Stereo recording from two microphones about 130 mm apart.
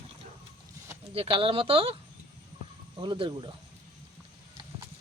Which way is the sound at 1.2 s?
45° right (ahead or behind).